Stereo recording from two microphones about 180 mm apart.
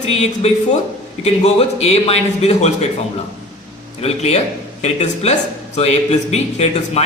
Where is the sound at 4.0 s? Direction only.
35° left (ahead or behind).